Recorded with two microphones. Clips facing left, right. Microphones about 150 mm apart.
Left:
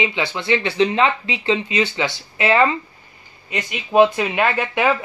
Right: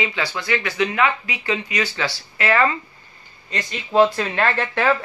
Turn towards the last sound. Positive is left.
turn(degrees=15)  # may be behind; listen again after turning